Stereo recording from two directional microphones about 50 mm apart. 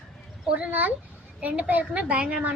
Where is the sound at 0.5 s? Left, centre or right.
Right.